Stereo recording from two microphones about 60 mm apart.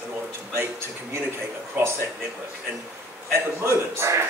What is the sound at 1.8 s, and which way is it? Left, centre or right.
Speech, right.